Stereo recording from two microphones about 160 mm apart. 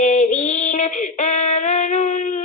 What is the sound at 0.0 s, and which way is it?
Female singing, 50° left (ahead or behind).